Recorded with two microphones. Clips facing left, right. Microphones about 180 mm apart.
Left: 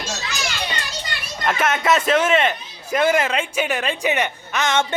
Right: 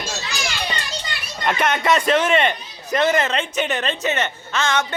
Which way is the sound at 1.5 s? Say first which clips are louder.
Even; 5° left (ahead or behind).